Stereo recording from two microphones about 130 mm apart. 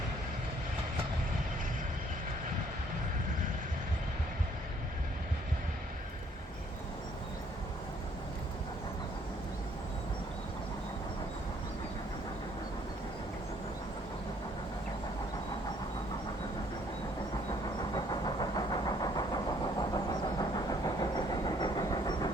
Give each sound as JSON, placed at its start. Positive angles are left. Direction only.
{"t": 17.9, "sound": "vehicle", "side_deg": 30}